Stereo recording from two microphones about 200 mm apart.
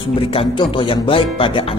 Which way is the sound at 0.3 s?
25° left (ahead or behind).